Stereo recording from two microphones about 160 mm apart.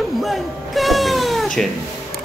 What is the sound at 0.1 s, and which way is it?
Cat, centre (ahead or behind).